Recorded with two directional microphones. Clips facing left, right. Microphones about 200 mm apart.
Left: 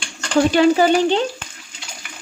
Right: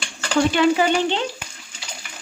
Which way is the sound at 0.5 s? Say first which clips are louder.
Left 6 dB; 40° left (ahead or behind).